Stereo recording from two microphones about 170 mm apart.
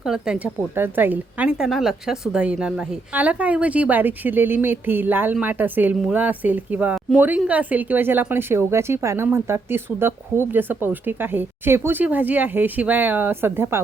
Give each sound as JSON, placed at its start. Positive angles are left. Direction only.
{"t": 0.0, "sound": "speech", "side_deg": -5}